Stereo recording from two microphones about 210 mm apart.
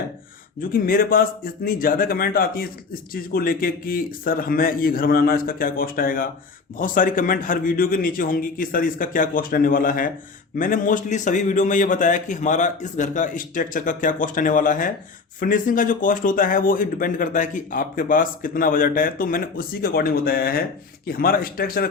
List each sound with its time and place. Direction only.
0.6 s speech: 45° left (ahead or behind)